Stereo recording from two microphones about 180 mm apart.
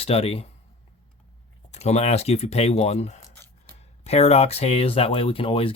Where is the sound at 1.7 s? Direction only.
40° left (ahead or behind).